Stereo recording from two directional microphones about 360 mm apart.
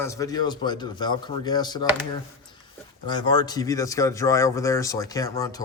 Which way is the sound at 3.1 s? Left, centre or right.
Centre.